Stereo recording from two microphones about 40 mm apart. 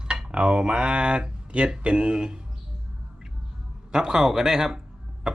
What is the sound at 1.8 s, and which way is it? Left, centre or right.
Speech, right.